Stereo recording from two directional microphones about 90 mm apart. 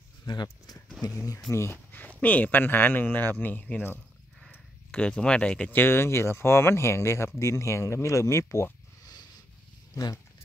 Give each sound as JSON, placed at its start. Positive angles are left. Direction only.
{"t": 0.3, "sound": "speech", "side_deg": 50}
{"t": 1.5, "sound": "speech", "side_deg": 30}
{"t": 9.9, "sound": "speech", "side_deg": 40}